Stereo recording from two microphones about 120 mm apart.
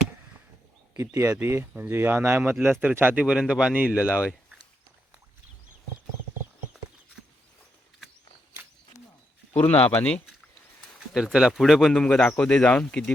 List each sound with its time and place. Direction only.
0.9 s speech: 25° right (ahead or behind)
9.5 s speech: 15° left (ahead or behind)
11.1 s speech: 5° right (ahead or behind)